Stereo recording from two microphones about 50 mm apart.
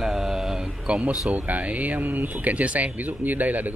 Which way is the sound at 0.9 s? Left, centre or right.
Right.